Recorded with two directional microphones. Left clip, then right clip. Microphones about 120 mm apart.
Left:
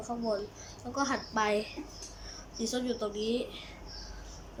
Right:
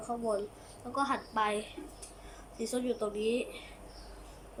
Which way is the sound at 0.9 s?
10° right (ahead or behind).